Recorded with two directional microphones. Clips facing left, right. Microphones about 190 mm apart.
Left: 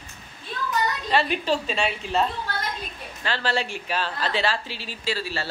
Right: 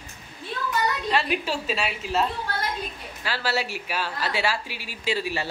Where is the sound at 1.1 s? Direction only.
5° right (ahead or behind).